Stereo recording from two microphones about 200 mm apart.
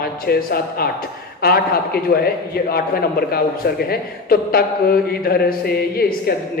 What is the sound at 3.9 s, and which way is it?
Speech, 50° left (ahead or behind).